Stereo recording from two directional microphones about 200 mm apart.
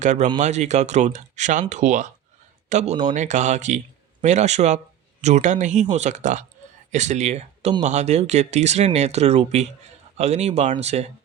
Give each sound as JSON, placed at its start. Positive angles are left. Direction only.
{"t": 0.0, "sound": "speech", "side_deg": -35}